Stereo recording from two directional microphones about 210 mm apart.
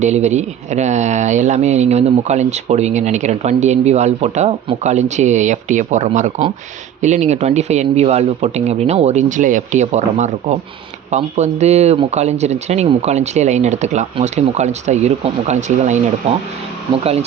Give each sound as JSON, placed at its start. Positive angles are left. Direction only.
{"t": 0.0, "sound": "speech", "side_deg": -35}